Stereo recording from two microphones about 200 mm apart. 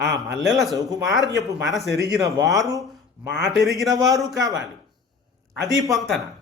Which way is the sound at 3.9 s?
20° right (ahead or behind).